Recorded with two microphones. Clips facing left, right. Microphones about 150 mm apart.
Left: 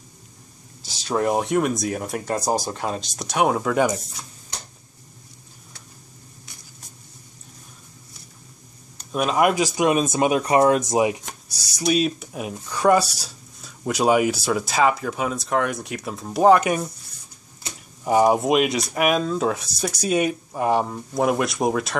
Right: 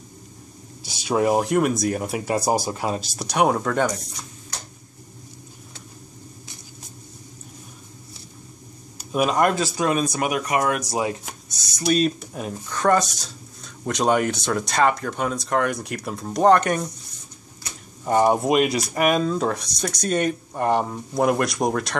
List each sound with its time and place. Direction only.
0.8 s speech: 10° right (ahead or behind); by 3.9 s 5° left (ahead or behind)
8.9 s a sound: 5° right (ahead or behind)
9.4 s speech: 10° left (ahead or behind)
11.8 s speech: centre (ahead or behind)
18.0 s speech: 5° left (ahead or behind)